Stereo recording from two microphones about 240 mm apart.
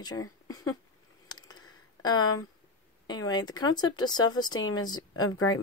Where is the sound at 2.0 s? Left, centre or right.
Centre.